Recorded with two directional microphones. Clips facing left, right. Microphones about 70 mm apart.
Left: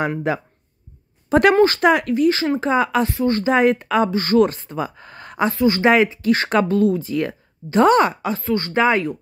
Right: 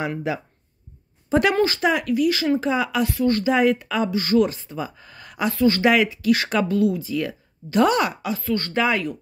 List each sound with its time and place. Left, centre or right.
0.3 s speech: left
2.1 s speech: left
3.1 s speech: left
3.4 s speech: left
5.5 s speech: left
8.5 s speech: left